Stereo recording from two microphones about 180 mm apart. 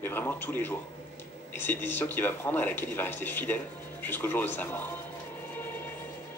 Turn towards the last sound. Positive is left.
turn(degrees=10)  # may be behind; listen again after turning